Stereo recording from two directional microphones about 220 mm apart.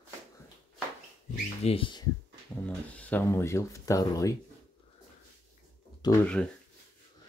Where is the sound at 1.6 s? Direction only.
25° left (ahead or behind).